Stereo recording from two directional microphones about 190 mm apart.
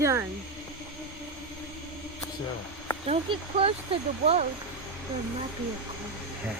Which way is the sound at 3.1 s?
30° right (ahead or behind).